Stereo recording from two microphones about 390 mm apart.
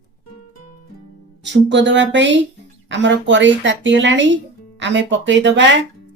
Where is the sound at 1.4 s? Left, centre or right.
Right.